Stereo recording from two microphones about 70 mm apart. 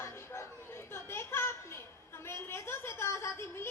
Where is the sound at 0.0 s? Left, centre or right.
Left.